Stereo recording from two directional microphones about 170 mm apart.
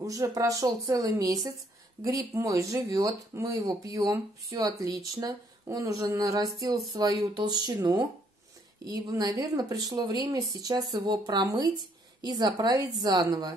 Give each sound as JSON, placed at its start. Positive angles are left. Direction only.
{"t": 0.0, "sound": "speech", "side_deg": -20}